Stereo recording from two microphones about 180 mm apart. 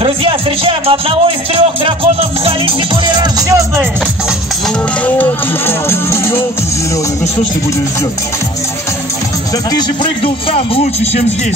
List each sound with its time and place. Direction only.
0.0 s speech: 30° right (ahead or behind)
5.0 s music: 10° left (ahead or behind)
9.7 s a man's voice: 25° left (ahead or behind)